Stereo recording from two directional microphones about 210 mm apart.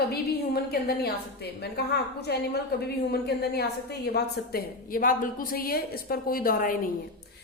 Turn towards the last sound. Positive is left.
turn(degrees=40)  # may be behind; listen again after turning